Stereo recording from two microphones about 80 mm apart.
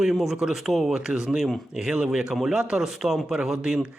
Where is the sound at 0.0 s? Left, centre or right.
Centre.